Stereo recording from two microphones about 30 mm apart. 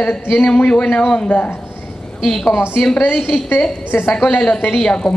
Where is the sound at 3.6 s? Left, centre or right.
Left.